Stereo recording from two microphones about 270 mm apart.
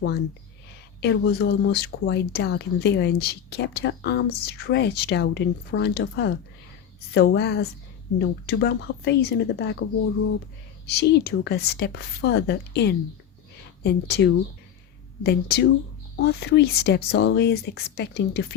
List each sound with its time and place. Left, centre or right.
1.0 s speech: left
10.8 s speech: left